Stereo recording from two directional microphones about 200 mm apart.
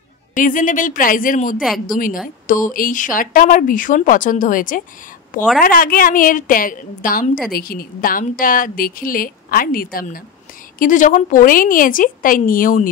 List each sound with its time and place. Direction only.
0.3 s a woman's voice: 40° left (ahead or behind)
1.6 s a woman's voice: centre (ahead or behind)
2.2 s a woman's voice: 40° left (ahead or behind)